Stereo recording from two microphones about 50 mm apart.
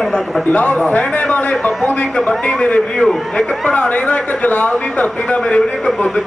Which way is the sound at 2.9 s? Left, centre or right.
Centre.